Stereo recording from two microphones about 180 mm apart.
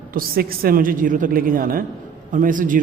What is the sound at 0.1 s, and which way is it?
A man's voice, 55° right (ahead or behind).